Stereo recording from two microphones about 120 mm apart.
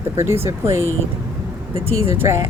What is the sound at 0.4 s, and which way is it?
Speech, 20° right (ahead or behind).